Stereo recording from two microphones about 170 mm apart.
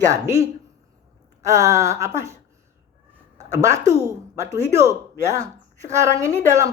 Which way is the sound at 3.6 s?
20° right (ahead or behind).